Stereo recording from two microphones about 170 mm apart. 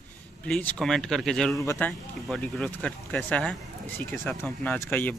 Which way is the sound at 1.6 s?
20° left (ahead or behind).